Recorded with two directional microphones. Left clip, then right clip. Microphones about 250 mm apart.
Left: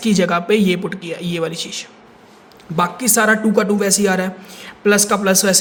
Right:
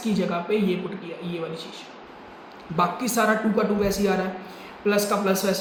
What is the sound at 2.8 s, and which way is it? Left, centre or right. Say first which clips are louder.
Speech: left 6 dB; left.